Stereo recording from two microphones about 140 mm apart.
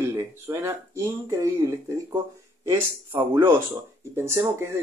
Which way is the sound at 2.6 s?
20° right (ahead or behind).